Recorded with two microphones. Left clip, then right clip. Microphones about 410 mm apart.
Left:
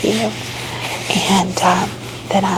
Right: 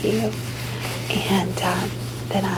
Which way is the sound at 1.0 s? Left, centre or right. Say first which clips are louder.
Left 7 dB; left.